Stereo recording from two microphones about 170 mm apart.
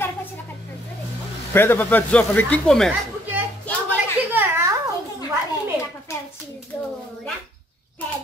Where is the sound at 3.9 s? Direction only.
10° right (ahead or behind).